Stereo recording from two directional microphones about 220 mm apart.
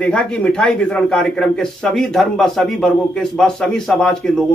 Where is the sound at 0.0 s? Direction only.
5° left (ahead or behind).